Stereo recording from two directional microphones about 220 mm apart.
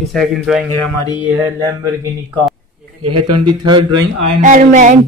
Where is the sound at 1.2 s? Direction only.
15° right (ahead or behind).